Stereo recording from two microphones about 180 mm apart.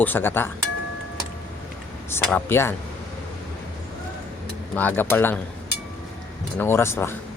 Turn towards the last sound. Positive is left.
turn(degrees=15)  # may be behind; listen again after turning